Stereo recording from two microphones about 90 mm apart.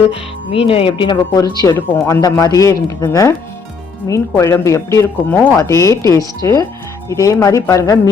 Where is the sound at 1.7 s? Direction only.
25° left (ahead or behind).